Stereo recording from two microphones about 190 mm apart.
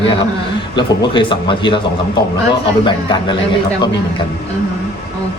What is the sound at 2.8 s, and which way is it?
Speech, 25° left (ahead or behind).